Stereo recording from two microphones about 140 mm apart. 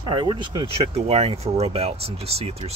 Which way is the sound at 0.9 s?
45° right (ahead or behind).